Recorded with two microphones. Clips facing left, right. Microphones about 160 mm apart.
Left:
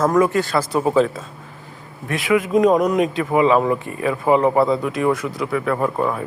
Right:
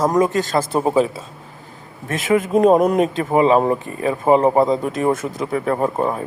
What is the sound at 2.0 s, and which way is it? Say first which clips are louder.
Speech: right 1 dB; 45° right (ahead or behind).